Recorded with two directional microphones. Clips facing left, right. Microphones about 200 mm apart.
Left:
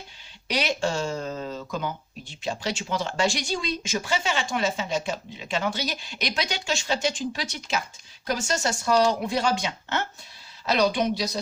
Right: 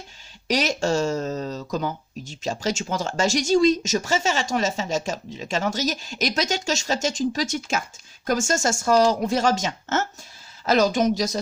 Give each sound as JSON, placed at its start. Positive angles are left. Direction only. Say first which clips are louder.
{"t": 0.4, "sound": "speech", "louder": "right 4 dB", "side_deg": -40}